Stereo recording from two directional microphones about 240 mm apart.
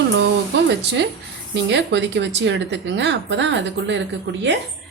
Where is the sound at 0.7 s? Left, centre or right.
Right.